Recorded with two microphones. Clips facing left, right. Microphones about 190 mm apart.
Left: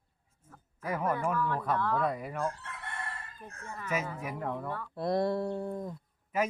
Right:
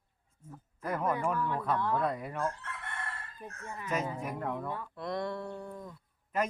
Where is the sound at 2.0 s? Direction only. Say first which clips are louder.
Left 1 dB; 5° left (ahead or behind).